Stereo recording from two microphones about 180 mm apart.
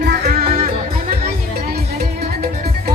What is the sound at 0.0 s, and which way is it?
Music, 60° right (ahead or behind).